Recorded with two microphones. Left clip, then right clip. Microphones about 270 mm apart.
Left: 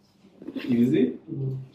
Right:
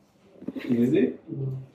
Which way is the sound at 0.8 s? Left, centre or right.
Centre.